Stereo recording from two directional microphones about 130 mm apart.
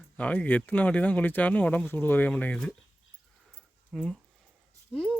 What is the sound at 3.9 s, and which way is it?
Speech, 5° left (ahead or behind).